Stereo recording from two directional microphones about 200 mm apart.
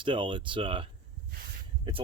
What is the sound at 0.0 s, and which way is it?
Speech, 25° right (ahead or behind).